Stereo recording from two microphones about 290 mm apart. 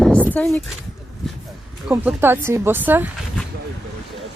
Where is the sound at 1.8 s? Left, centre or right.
Centre.